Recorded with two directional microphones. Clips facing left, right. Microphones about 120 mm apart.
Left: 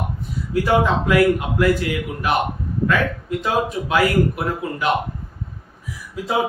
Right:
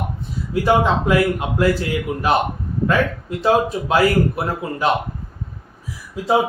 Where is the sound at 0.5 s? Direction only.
25° right (ahead or behind).